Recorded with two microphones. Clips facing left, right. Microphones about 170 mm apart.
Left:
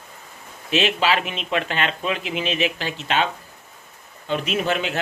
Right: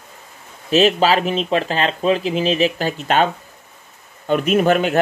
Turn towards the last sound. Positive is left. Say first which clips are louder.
# right 8 dB
turn(degrees=-50)  # may be behind; listen again after turning